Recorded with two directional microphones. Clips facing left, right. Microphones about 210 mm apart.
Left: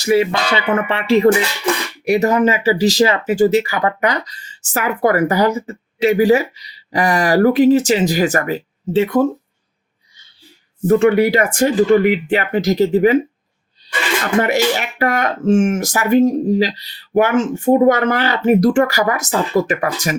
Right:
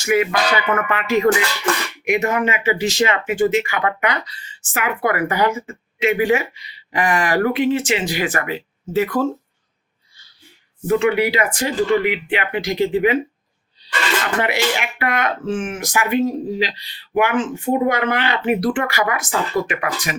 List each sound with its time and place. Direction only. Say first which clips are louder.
0.0 s speech: left 3 dB; 30° left (ahead or behind)
9.0 s speech: left 4 dB; 20° left (ahead or behind)
10.8 s speech: left 5 dB; 45° left (ahead or behind)
14.8 s speech: left 4 dB; 40° left (ahead or behind)